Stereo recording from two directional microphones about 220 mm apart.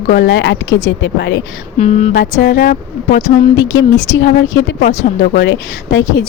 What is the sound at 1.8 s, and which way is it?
Speech, 30° left (ahead or behind).